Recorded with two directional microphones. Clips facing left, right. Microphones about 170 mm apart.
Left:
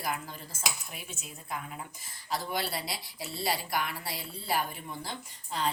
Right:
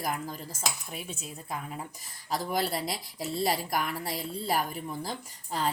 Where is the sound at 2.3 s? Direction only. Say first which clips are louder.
Right 4 dB; 45° right (ahead or behind).